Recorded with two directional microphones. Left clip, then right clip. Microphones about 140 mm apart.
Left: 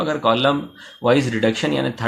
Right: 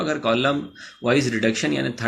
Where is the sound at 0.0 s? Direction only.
40° left (ahead or behind).